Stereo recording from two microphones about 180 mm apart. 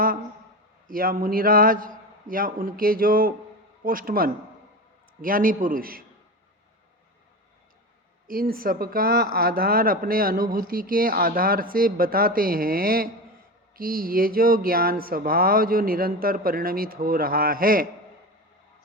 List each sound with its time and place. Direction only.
0.9 s speech: 50° right (ahead or behind)
8.3 s speech: 55° right (ahead or behind)